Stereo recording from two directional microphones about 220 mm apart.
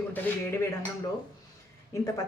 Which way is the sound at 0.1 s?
10° left (ahead or behind).